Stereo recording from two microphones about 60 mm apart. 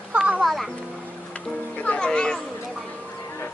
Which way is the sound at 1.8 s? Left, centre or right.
Left.